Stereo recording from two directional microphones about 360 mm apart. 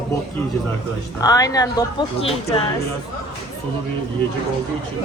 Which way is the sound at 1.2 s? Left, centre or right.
Centre.